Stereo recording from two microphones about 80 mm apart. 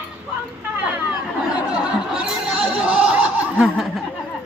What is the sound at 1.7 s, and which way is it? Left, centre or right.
Laughter, centre.